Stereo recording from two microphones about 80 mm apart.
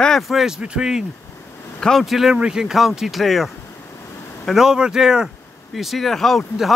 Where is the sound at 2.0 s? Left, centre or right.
Centre.